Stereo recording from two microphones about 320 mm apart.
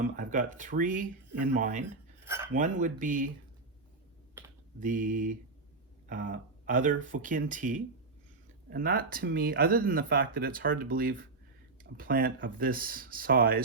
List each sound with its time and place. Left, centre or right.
0.0 s speech: right
2.2 s cutlery: centre
2.5 s speech: right
4.8 s speech: right